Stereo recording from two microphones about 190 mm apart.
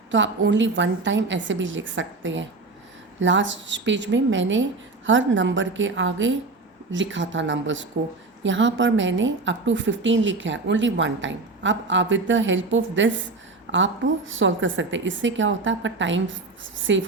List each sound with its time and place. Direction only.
0.1 s a woman's voice: 75° right (ahead or behind); by 6.3 s 90° right
6.9 s a woman's voice: 75° right (ahead or behind)